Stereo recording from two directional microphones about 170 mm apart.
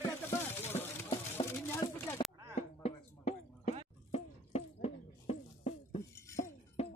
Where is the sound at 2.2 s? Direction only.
30° left (ahead or behind).